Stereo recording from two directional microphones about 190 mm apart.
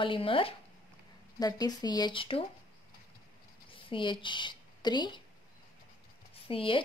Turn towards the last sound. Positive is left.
turn(degrees=30)  # may be behind; listen again after turning